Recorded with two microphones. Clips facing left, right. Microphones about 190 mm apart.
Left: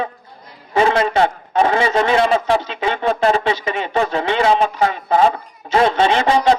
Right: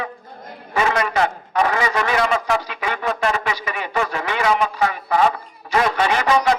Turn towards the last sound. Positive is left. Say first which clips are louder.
# left 3 dB
turn(degrees=30)  # may be behind; listen again after turning